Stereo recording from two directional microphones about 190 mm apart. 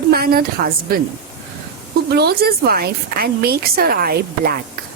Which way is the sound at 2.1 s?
55° right (ahead or behind).